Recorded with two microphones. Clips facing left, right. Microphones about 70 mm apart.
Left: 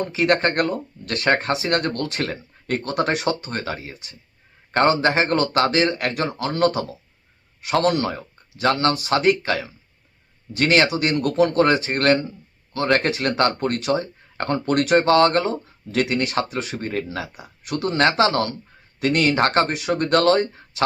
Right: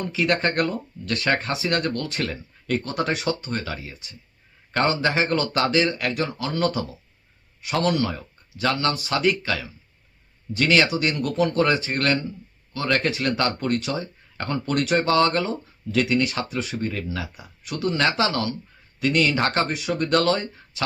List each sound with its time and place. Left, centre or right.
0.0 s speech: left
7.9 s speech: left
11.2 s speech: left
16.6 s speech: left
16.8 s speech: left
19.7 s speech: left
20.0 s speech: left